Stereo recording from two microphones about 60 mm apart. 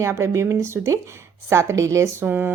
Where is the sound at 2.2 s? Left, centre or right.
Right.